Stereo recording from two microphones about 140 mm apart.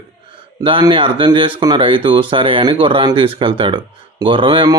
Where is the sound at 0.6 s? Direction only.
35° right (ahead or behind).